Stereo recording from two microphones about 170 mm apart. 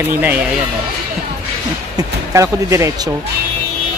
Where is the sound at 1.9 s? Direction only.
20° right (ahead or behind).